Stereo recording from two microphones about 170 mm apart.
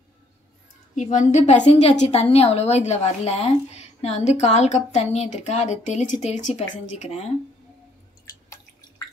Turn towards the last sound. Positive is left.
turn(degrees=40)  # may be behind; listen again after turning